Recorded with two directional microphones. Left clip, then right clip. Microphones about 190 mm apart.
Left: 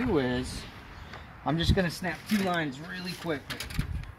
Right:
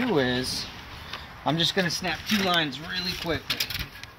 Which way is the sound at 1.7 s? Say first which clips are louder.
Right 4 dB; 10° left (ahead or behind).